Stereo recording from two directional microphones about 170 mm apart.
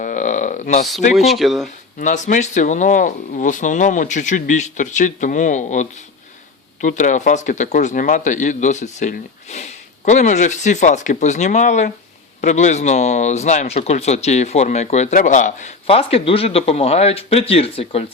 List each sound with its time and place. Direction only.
0.0 s a sound: 50° left (ahead or behind)
1.1 s speech: centre (ahead or behind)
2.0 s speech: 45° left (ahead or behind)